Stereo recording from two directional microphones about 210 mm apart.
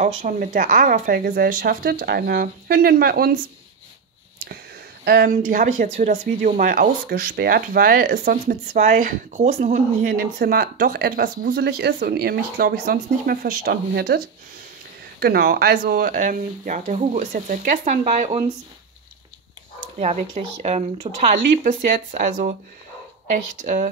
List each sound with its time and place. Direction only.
0.0 s speech: 40° right (ahead or behind)
5.0 s speech: 45° right (ahead or behind)
20.0 s speech: 30° right (ahead or behind)
23.6 s speech: 40° right (ahead or behind)